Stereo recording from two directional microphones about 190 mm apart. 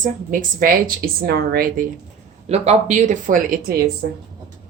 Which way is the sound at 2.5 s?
35° right (ahead or behind).